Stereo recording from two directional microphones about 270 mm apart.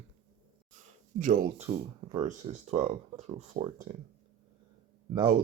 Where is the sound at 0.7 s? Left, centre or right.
Right.